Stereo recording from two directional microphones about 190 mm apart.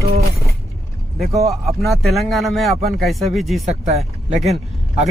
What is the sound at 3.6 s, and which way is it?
Speech, 35° right (ahead or behind).